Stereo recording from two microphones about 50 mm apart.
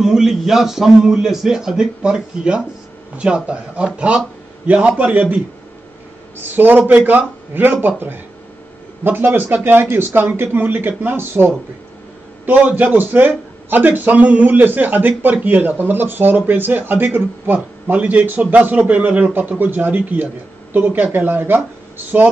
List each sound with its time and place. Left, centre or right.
0.0 s a man's voice: centre; by 9.6 s right
9.6 s speech: right
12.4 s a man's voice: right
14.6 s a man's voice: right
17.9 s a man's voice: right